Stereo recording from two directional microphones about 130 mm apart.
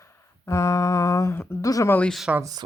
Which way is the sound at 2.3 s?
10° right (ahead or behind).